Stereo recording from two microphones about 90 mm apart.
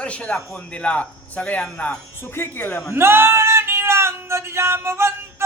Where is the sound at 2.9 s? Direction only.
25° right (ahead or behind).